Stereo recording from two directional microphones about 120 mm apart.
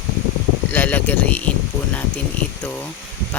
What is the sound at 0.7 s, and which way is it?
Speech, 15° left (ahead or behind).